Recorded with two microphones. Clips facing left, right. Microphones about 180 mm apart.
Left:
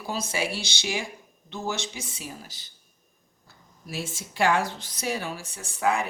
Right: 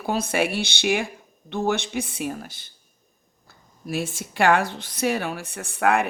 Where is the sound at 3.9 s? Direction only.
55° right (ahead or behind).